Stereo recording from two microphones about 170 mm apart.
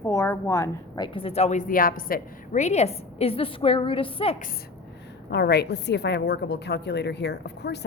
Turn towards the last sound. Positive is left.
turn(degrees=80)